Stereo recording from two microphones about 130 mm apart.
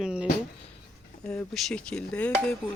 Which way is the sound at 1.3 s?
5° left (ahead or behind).